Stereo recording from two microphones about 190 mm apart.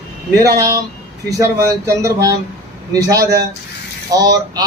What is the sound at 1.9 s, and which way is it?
Speech, 15° right (ahead or behind).